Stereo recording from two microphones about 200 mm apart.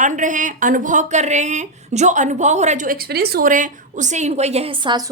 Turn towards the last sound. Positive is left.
turn(degrees=-20)  # may be behind; listen again after turning